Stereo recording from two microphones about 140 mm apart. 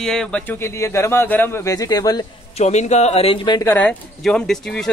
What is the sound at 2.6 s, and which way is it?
Speech, 55° left (ahead or behind).